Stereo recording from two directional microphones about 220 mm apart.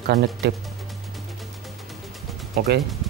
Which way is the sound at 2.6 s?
40° right (ahead or behind).